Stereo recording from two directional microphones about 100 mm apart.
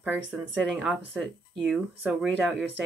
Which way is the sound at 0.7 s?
15° right (ahead or behind).